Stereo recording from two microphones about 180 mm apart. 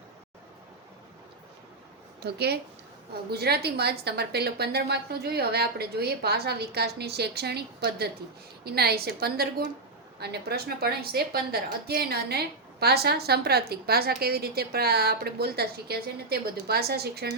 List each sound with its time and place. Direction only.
2.2 s a woman's voice: 65° right (ahead or behind)